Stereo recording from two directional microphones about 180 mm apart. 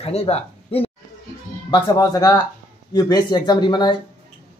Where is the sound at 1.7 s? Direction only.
20° left (ahead or behind).